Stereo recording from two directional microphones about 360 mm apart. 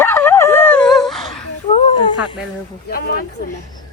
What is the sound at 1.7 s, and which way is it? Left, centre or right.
Snake, centre.